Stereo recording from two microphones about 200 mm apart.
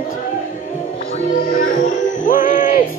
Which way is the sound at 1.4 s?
45° left (ahead or behind).